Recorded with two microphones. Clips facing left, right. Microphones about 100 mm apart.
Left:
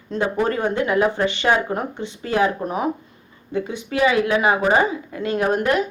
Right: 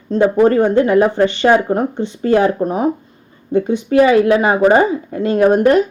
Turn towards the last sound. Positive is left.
turn(degrees=-35)  # may be behind; listen again after turning